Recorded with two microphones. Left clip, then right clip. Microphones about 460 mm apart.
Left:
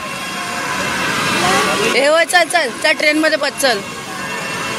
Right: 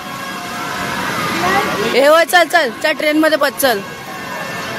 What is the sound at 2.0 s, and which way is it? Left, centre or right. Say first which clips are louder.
Speech: right 4 dB; right.